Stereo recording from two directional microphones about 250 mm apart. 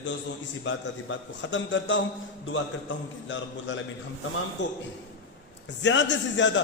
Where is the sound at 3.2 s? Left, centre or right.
Left.